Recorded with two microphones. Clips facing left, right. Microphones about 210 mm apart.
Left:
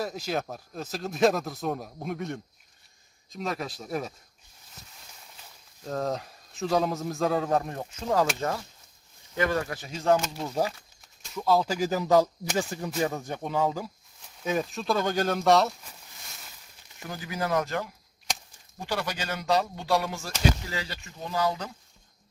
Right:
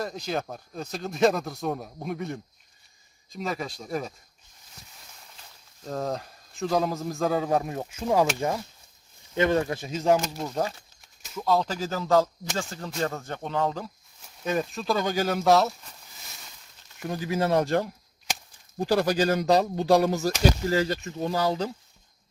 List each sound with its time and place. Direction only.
0.0 s speech: 5° left (ahead or behind)
5.8 s speech: centre (ahead or behind); by 10.2 s 20° right (ahead or behind)
10.4 s speech: 5° left (ahead or behind)
17.1 s speech: 25° right (ahead or behind)